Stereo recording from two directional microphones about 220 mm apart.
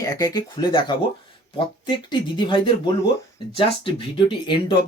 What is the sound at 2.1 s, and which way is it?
Speech, 20° left (ahead or behind).